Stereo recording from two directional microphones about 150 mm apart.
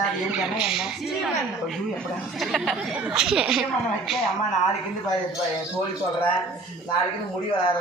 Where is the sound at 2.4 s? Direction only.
Centre (ahead or behind).